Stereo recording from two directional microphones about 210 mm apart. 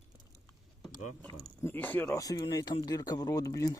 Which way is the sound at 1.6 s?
10° left (ahead or behind).